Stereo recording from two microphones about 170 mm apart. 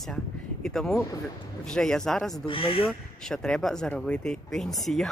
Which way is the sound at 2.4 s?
30° left (ahead or behind).